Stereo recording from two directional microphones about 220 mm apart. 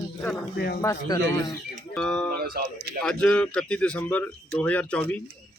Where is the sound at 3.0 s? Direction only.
5° left (ahead or behind).